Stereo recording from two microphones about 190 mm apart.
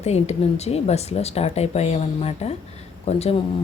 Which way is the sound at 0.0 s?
35° left (ahead or behind).